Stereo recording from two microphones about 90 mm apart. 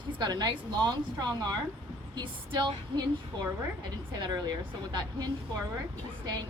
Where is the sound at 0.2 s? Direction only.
50° right (ahead or behind).